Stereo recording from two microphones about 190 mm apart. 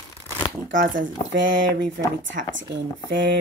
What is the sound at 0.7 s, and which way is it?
Speech, 45° right (ahead or behind).